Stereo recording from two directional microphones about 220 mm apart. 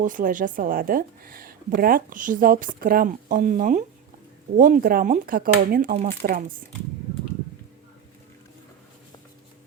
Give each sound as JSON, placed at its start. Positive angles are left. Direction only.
{"t": 0.0, "sound": "speech", "side_deg": -35}